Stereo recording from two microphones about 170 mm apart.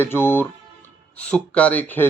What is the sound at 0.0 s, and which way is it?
Speech, 15° left (ahead or behind).